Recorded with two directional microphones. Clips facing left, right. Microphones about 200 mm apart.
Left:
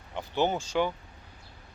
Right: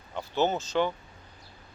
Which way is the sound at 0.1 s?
15° left (ahead or behind).